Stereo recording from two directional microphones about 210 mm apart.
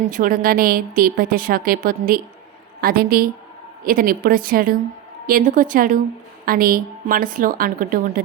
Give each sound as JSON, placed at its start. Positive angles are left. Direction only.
{"t": 0.1, "sound": "a woman's voice", "side_deg": -40}